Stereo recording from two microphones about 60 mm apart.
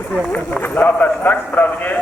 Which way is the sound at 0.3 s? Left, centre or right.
Left.